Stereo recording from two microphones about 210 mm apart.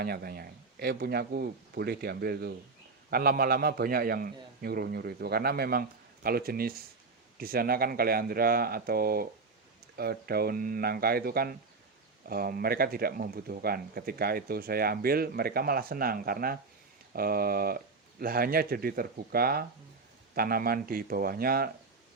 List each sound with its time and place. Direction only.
0.0 s speech: 45° right (ahead or behind)